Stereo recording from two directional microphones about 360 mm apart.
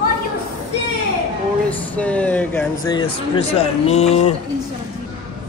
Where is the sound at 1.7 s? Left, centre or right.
Centre.